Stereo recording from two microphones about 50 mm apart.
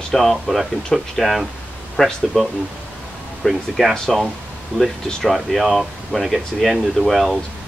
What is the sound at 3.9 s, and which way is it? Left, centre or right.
Speech, centre.